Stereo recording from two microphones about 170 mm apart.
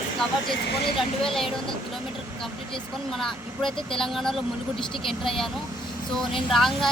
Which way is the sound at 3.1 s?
Centre (ahead or behind).